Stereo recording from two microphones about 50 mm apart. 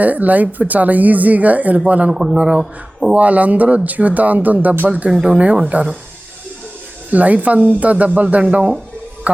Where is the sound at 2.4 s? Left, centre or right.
Right.